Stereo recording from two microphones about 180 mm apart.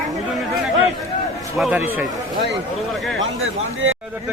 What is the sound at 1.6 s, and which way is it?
Speech, 5° right (ahead or behind).